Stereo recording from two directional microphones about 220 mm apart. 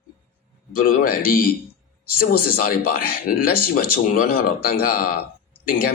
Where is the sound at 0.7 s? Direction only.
40° left (ahead or behind).